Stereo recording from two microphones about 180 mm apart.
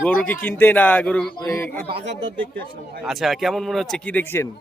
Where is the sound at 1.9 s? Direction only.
75° right (ahead or behind).